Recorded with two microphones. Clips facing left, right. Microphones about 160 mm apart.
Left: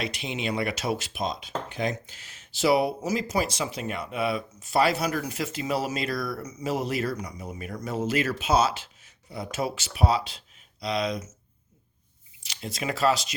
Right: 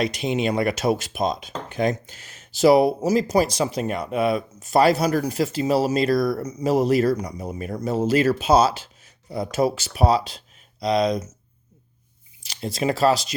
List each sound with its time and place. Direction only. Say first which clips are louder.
0.0 s speech: right 8 dB; 40° right (ahead or behind)
12.4 s speech: right 8 dB; 40° right (ahead or behind)